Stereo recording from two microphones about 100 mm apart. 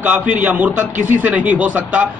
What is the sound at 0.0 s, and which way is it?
A man's voice, 15° right (ahead or behind).